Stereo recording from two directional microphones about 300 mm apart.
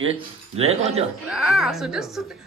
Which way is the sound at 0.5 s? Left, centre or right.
Centre.